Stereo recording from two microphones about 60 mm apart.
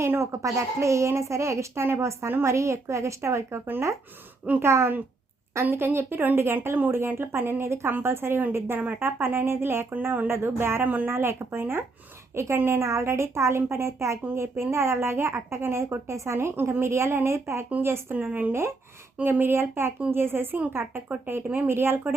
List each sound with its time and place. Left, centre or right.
0.0 s a woman's voice: right
4.6 s speech: right
12.3 s a woman's voice: right
18.3 s speech: right